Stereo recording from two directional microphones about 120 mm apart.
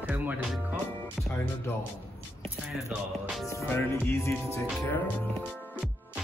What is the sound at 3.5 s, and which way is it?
Music, 20° left (ahead or behind).